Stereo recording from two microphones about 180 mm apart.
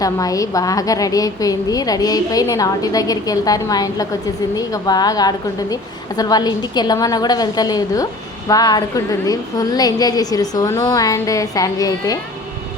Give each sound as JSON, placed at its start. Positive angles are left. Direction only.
{"t": 0.0, "sound": "a woman's voice", "side_deg": 20}